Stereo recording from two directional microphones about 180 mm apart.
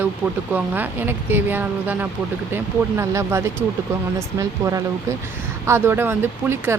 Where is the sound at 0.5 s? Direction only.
10° right (ahead or behind).